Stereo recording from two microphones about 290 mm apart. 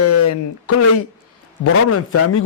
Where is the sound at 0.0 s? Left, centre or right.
Left.